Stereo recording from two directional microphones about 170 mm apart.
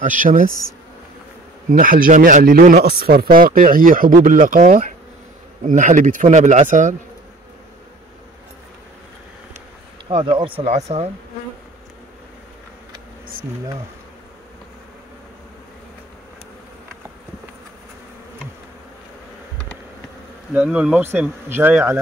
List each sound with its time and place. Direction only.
0.0 s speech: 50° right (ahead or behind)
1.7 s speech: 55° right (ahead or behind)
10.0 s speech: 30° right (ahead or behind)
20.5 s speech: 5° right (ahead or behind)